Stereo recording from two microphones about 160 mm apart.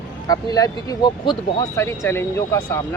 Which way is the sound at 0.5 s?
25° left (ahead or behind).